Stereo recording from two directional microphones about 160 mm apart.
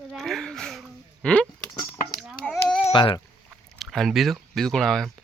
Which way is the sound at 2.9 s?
30° left (ahead or behind).